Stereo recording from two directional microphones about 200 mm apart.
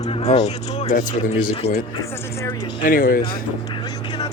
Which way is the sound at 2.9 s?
45° left (ahead or behind).